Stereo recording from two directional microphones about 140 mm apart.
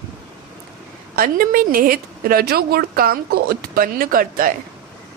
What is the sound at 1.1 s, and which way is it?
A woman's voice, 85° right.